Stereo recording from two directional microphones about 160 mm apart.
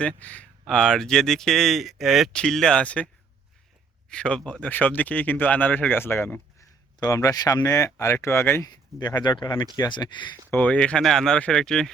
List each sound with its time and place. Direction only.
0.2 s speech: 10° left (ahead or behind)
4.1 s speech: 5° left (ahead or behind)
9.0 s speech: 25° left (ahead or behind)
10.5 s speech: 10° left (ahead or behind)